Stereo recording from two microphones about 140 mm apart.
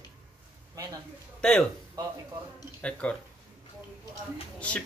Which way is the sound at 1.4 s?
5° left (ahead or behind).